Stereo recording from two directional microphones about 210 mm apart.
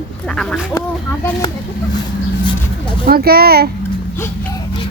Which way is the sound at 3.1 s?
45° right (ahead or behind).